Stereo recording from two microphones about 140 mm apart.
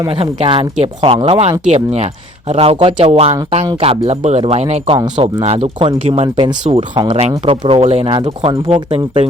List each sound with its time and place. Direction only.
0.1 s speech: 45° right (ahead or behind)
7.2 s speech: 45° right (ahead or behind)
8.1 s speech: 35° right (ahead or behind)